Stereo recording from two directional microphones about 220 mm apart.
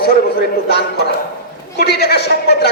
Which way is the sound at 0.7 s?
45° left (ahead or behind).